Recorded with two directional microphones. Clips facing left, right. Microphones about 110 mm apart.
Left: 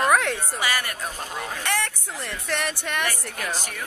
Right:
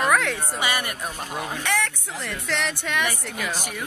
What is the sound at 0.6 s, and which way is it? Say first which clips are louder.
Speech: right 1 dB; 20° right (ahead or behind).